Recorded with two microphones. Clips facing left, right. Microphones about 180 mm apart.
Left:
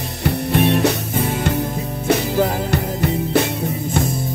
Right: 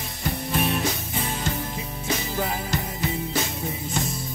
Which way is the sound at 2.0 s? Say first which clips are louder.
Left 10 dB; 70° left (ahead or behind).